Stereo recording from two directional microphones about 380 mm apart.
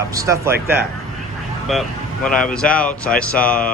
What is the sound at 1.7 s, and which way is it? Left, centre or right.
Speech, centre.